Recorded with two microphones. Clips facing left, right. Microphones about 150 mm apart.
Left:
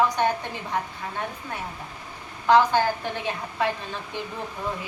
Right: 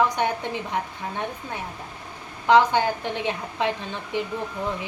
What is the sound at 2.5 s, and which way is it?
A woman's voice, 20° right (ahead or behind).